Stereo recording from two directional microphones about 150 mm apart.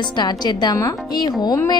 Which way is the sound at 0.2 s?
30° left (ahead or behind).